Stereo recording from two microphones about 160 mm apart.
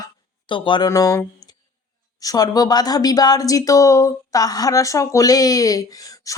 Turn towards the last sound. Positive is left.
turn(degrees=20)  # may be behind; listen again after turning